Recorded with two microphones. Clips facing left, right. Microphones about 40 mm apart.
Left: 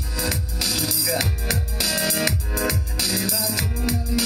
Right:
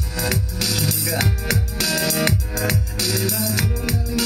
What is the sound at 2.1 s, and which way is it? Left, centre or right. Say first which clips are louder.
Music: right 2 dB; right.